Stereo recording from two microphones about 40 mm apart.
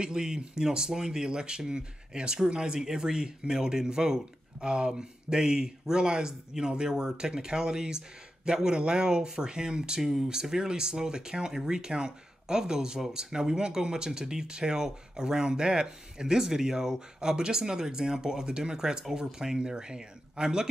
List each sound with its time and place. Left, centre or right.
0.0 s speech: centre